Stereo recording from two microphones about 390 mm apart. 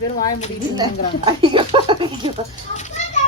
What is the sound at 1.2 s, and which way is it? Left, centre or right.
Speech, centre.